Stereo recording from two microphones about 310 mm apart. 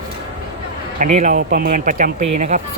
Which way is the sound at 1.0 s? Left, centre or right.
Right.